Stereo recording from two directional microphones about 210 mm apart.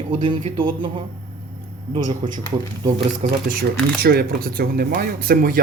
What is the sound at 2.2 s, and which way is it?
Speech, 25° right (ahead or behind).